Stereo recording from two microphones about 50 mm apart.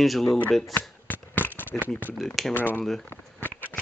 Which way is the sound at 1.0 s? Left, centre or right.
Left.